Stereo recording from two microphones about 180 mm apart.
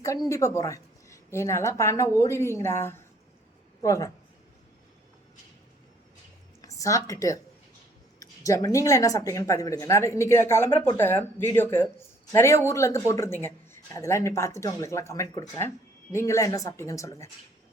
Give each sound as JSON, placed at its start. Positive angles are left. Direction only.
{"t": 0.3, "sound": "speech", "side_deg": 15}
{"t": 6.6, "sound": "a woman's voice", "side_deg": 20}